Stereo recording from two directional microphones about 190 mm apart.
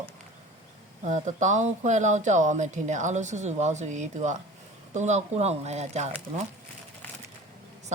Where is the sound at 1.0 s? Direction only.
40° right (ahead or behind).